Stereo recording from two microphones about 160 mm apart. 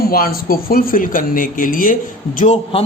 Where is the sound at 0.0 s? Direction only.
70° left (ahead or behind).